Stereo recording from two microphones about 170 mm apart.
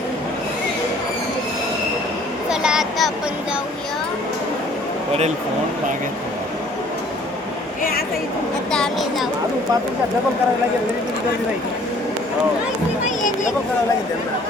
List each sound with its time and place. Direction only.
2.5 s a sound: 5° right (ahead or behind)
7.8 s a woman's voice: 60° left (ahead or behind)
8.7 s speech: centre (ahead or behind)
13.1 s speech: 45° left (ahead or behind)